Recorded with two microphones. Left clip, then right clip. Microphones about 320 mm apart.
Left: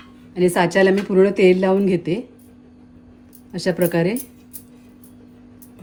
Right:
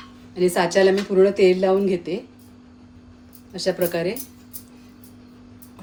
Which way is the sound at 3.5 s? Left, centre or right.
Left.